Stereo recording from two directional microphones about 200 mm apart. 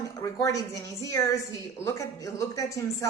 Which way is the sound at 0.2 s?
15° left (ahead or behind).